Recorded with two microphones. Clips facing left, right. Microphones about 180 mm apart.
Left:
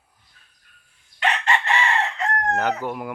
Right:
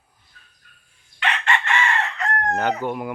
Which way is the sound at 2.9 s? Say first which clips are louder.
Right 2 dB; centre (ahead or behind).